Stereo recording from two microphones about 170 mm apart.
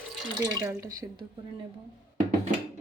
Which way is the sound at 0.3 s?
20° right (ahead or behind).